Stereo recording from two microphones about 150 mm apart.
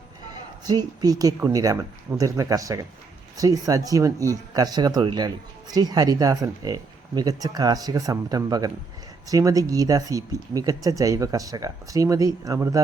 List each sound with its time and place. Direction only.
0.6 s speech: 25° right (ahead or behind)